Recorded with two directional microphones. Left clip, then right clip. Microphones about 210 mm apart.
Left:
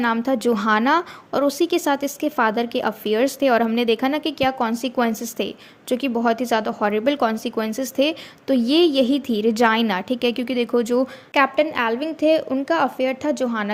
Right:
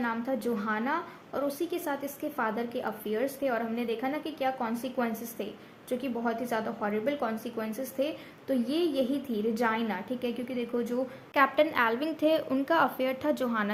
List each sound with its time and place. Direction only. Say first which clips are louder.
0.0 s a woman's voice: left 11 dB; 40° left (ahead or behind)
11.4 s a woman's voice: left 6 dB; 25° left (ahead or behind)